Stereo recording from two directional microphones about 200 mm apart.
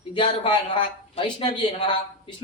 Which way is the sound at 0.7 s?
25° left (ahead or behind).